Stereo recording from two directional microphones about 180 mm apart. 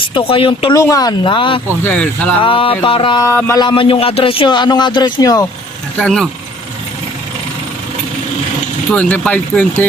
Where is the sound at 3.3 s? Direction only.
15° left (ahead or behind).